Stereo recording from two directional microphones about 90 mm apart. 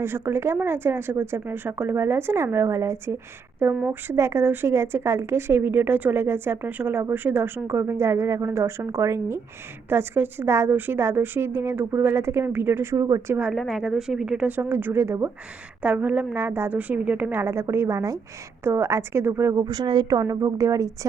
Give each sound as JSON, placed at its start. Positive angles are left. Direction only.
{"t": 0.0, "sound": "a woman's voice", "side_deg": -25}
{"t": 13.4, "sound": "a woman's voice", "side_deg": 0}
{"t": 15.8, "sound": "a woman's voice", "side_deg": -15}
{"t": 19.5, "sound": "speech", "side_deg": -50}
{"t": 20.2, "sound": "a woman's voice", "side_deg": -40}